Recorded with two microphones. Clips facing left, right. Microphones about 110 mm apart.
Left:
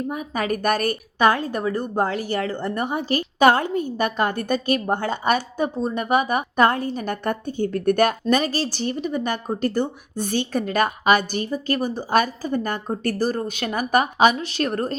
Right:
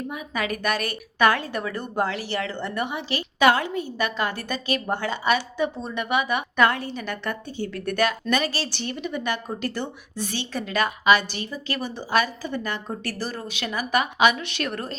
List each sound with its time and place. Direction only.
0.1 s a woman's voice: 45° left (ahead or behind)